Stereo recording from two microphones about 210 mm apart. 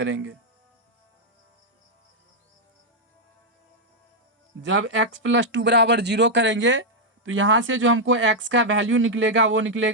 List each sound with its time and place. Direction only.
0.0 s speech: 65° right (ahead or behind)
4.7 s speech: 60° right (ahead or behind)